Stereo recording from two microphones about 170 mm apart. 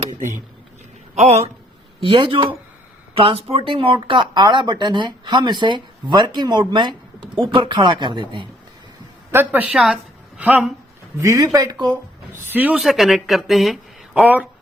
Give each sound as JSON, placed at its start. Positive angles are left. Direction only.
{"t": 0.2, "sound": "speech", "side_deg": -50}
{"t": 1.1, "sound": "speech", "side_deg": -40}
{"t": 9.3, "sound": "a woman's voice", "side_deg": -10}
{"t": 11.2, "sound": "speech", "side_deg": -20}
{"t": 12.3, "sound": "speech", "side_deg": -10}